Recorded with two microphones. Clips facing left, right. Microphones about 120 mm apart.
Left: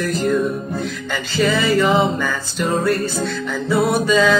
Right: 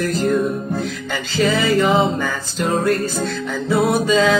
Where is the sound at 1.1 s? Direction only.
20° right (ahead or behind).